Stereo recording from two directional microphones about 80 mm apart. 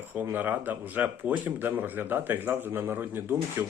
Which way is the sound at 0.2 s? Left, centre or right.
Right.